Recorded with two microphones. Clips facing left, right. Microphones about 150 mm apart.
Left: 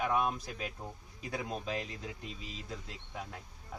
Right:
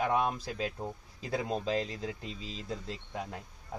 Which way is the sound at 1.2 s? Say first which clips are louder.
Right 5 dB; 30° right (ahead or behind).